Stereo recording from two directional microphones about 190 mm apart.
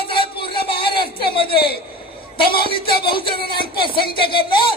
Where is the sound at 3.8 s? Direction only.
25° left (ahead or behind).